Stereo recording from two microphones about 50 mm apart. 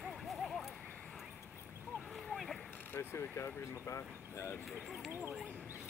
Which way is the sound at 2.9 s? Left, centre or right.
Left.